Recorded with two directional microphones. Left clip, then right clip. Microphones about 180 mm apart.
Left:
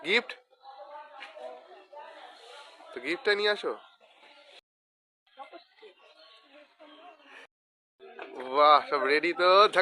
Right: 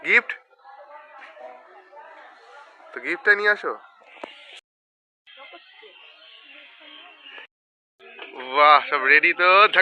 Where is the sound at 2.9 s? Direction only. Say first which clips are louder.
Right 8 dB; 10° left (ahead or behind).